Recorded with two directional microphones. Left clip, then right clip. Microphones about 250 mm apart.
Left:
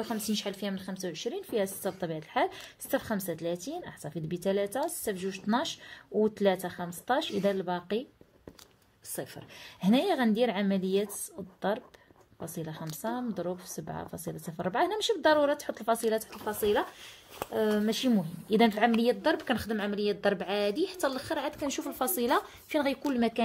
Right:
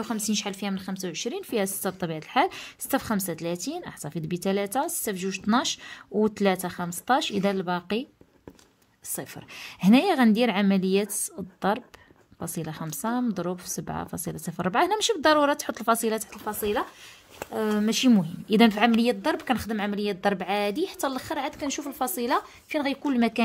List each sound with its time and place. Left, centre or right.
0.0 s speech: right
9.1 s speech: right
12.4 s speech: right
21.6 s a woman's voice: centre
23.0 s speech: right